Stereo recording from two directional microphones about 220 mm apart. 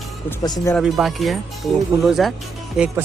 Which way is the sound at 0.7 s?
Centre (ahead or behind).